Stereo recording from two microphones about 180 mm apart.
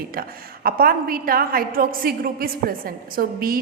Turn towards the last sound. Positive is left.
turn(degrees=-55)  # may be behind; listen again after turning